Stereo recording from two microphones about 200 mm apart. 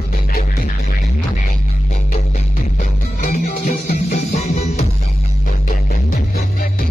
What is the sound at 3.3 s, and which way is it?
Music, 45° left (ahead or behind).